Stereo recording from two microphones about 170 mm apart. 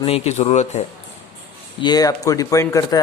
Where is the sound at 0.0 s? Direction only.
35° left (ahead or behind).